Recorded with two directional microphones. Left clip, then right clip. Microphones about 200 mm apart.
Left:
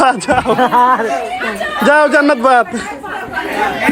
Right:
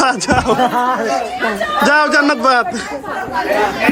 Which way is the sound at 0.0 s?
5° right (ahead or behind).